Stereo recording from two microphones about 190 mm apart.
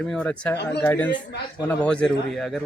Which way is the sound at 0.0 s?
5° left (ahead or behind).